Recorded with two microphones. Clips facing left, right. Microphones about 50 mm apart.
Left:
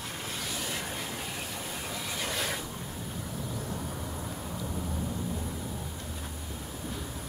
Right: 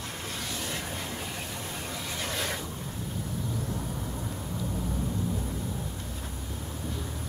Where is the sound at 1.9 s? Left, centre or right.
Centre.